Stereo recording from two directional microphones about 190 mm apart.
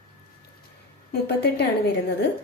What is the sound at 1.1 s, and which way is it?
Speech, 60° left (ahead or behind).